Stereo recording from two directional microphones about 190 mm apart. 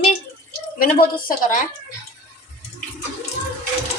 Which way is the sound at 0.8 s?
50° left (ahead or behind).